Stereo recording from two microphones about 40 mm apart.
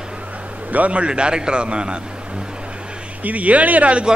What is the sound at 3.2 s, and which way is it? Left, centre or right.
Speech, right.